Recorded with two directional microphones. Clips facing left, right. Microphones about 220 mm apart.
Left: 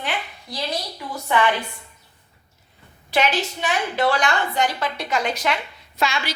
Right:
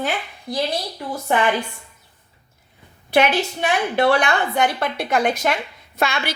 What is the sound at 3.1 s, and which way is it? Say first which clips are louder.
A woman's voice: right 4 dB; 60° right (ahead or behind).